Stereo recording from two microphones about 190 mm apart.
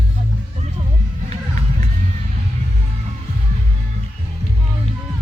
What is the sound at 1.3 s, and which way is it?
Music, 35° right (ahead or behind).